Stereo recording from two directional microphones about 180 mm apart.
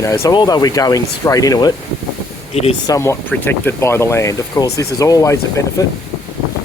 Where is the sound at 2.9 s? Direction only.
15° left (ahead or behind).